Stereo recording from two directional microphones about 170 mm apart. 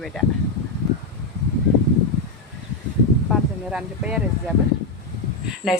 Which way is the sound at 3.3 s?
5° right (ahead or behind).